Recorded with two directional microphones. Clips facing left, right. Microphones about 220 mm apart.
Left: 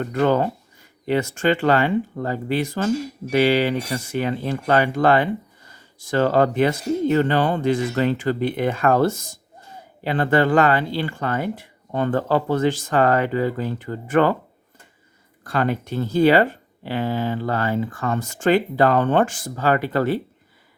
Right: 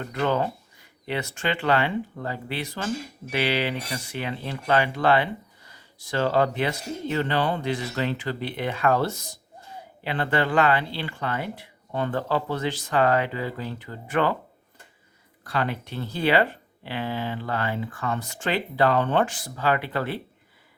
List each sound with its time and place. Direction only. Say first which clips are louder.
0.1 s speech: left 5 dB; 45° left (ahead or behind)
15.4 s speech: left 6 dB; 45° left (ahead or behind)